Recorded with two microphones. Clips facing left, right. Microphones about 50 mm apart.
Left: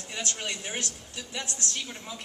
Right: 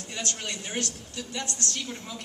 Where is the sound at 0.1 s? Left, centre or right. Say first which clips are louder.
Even; centre.